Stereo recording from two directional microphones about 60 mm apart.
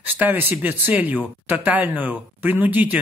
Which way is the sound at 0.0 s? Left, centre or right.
Right.